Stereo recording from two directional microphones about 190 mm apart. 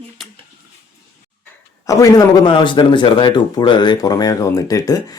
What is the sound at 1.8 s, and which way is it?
Speech, 20° left (ahead or behind).